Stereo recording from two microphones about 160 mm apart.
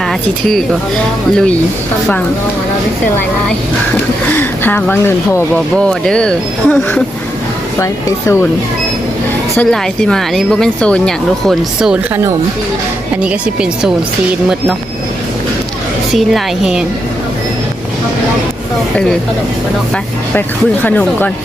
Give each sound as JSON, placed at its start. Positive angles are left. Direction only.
{"t": 0.1, "sound": "a woman's voice", "side_deg": 0}
{"t": 4.3, "sound": "speech", "side_deg": 10}
{"t": 7.8, "sound": "speech", "side_deg": 20}
{"t": 9.6, "sound": "a woman's voice", "side_deg": 5}
{"t": 13.2, "sound": "speech", "side_deg": -5}
{"t": 16.1, "sound": "a woman's voice", "side_deg": 0}
{"t": 20.8, "sound": "speech", "side_deg": 10}